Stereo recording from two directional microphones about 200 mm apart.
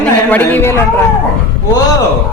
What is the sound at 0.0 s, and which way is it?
Speech, 10° left (ahead or behind).